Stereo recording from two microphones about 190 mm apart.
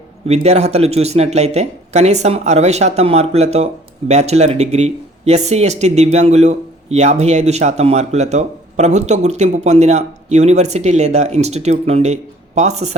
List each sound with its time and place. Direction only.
0.3 s speech: 35° right (ahead or behind)